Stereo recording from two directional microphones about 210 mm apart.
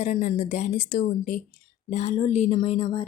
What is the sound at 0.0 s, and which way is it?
Speech, 35° left (ahead or behind).